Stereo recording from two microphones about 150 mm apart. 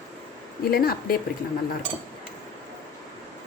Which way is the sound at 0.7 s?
80° left.